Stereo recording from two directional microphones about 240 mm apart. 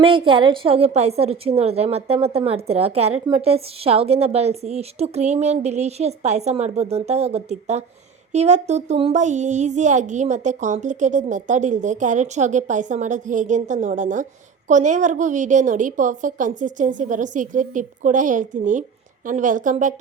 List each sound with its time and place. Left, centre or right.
0.0 s a woman's voice: right